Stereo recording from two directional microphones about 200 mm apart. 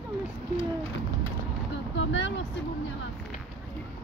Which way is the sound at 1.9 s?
65° left (ahead or behind).